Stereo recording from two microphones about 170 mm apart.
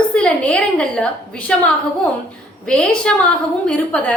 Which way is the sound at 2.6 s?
5° left (ahead or behind).